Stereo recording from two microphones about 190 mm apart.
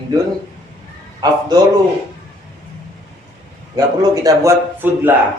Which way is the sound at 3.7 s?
20° right (ahead or behind).